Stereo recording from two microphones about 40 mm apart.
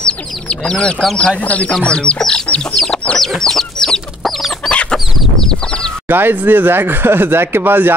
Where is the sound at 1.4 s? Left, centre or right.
Left.